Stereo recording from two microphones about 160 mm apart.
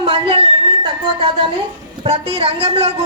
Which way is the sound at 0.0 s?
35° right (ahead or behind).